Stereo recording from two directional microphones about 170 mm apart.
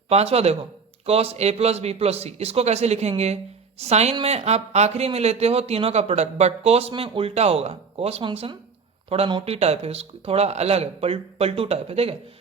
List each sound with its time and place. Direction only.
0.1 s a man's voice: 40° right (ahead or behind)